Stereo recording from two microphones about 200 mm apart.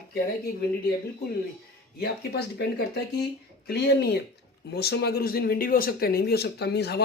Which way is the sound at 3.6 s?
55° left (ahead or behind).